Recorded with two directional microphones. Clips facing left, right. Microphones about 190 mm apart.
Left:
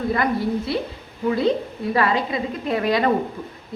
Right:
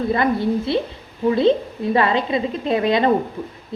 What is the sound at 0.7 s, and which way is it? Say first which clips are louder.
Speech: right 4 dB; 25° right (ahead or behind).